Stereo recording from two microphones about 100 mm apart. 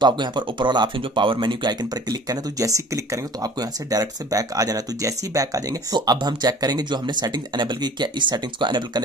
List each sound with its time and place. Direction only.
0.0 s speech: 50° right (ahead or behind)